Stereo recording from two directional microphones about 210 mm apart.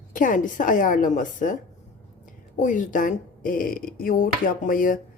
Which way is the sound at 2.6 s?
35° left (ahead or behind).